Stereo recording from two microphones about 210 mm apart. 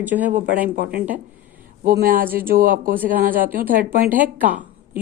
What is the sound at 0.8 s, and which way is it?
Speech, 45° right (ahead or behind).